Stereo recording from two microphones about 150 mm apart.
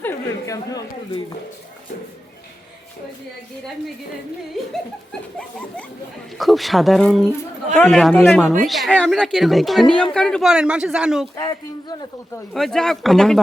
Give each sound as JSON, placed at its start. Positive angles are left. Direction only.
{"t": 0.0, "sound": "speech", "side_deg": 20}
{"t": 4.6, "sound": "a woman's voice", "side_deg": 0}
{"t": 11.3, "sound": "speech", "side_deg": 30}
{"t": 12.5, "sound": "a woman's voice", "side_deg": 0}